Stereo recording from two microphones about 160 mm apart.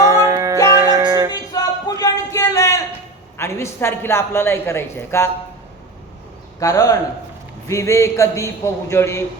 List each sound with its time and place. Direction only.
0.0 s music: 20° right (ahead or behind)
1.5 s a sound: 20° left (ahead or behind)
3.3 s a woman's voice: 15° left (ahead or behind)
6.6 s a man's voice: 20° left (ahead or behind)